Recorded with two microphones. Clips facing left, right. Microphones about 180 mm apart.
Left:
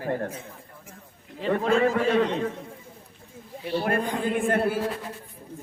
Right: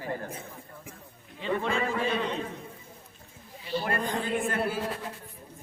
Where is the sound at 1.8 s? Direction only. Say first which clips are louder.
Left 7 dB; 80° left.